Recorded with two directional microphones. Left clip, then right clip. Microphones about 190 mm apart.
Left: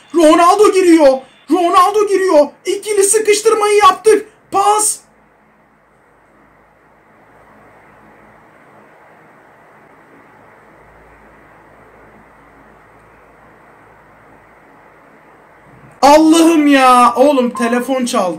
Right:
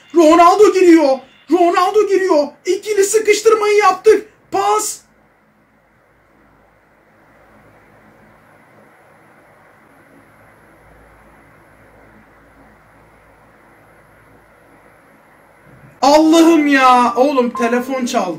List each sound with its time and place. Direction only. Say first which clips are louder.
0.1 s speech: even; 10° left (ahead or behind)
16.0 s speech: left 2 dB; 10° left (ahead or behind)